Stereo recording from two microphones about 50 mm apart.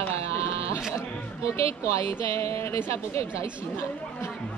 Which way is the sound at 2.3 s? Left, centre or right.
Left.